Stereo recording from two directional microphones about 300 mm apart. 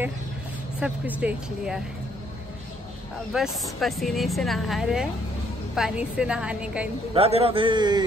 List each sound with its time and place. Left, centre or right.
0.7 s a woman's voice: centre
3.3 s a woman's voice: centre
7.2 s a man's voice: centre